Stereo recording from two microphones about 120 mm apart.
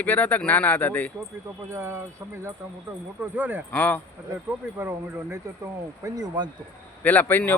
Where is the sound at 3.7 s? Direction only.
15° left (ahead or behind).